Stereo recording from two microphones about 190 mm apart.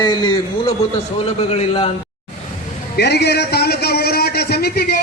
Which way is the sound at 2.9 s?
60° left (ahead or behind).